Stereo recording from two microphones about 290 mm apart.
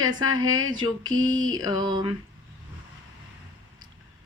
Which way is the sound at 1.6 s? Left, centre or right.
Centre.